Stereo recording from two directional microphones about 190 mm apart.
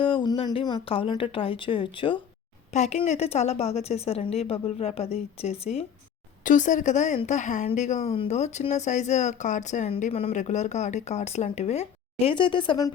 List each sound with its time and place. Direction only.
0.0 s a woman's voice: 25° left (ahead or behind)